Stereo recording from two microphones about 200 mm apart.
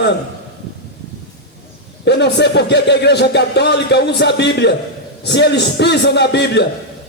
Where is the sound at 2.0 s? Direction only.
60° left (ahead or behind).